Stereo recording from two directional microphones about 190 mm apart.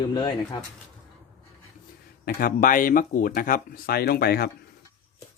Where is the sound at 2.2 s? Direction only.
45° left (ahead or behind).